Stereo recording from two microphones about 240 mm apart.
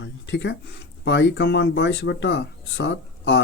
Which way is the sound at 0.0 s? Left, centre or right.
Left.